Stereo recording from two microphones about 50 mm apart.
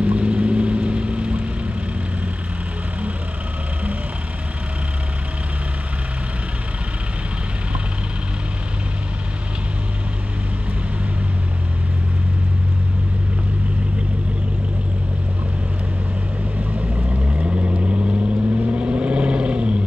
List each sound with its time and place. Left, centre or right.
0.0 s vehicle: right
16.5 s vehicle: right